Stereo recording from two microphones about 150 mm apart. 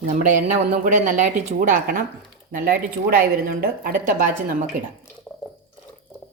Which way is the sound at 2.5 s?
75° right (ahead or behind).